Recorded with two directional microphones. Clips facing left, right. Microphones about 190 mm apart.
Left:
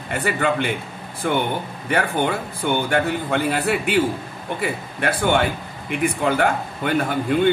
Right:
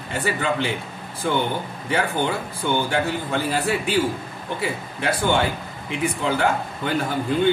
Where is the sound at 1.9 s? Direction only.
55° left (ahead or behind).